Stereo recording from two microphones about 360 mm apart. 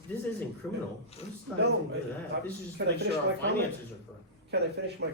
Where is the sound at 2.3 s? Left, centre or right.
Right.